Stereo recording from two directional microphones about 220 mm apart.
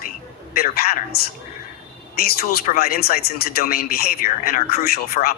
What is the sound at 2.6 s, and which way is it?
Speech, 45° left (ahead or behind).